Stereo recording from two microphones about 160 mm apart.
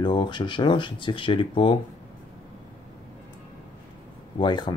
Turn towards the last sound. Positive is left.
turn(degrees=30)  # may be behind; listen again after turning